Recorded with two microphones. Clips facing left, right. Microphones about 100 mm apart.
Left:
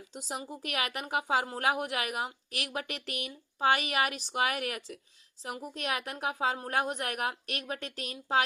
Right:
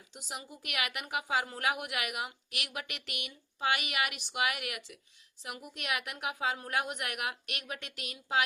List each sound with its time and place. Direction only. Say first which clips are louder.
0.1 s a woman's voice: left 5 dB; 35° left (ahead or behind)